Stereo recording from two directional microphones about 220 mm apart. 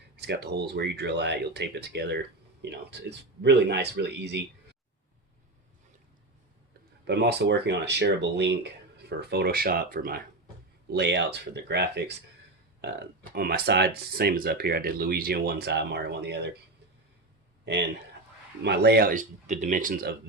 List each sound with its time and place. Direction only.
0.2 s speech: 50° right (ahead or behind)
7.1 s speech: 50° right (ahead or behind)
13.3 s speech: 45° right (ahead or behind)
18.6 s speech: 50° right (ahead or behind)